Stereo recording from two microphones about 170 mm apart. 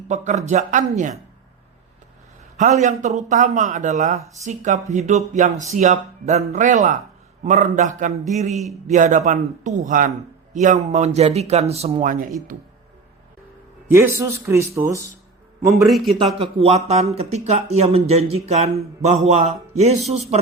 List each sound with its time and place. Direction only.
0.1 s speech: 45° right (ahead or behind)
2.6 s speech: 40° right (ahead or behind)
13.9 s speech: 15° right (ahead or behind)
15.7 s a man's voice: centre (ahead or behind)
16.1 s speech: 35° right (ahead or behind)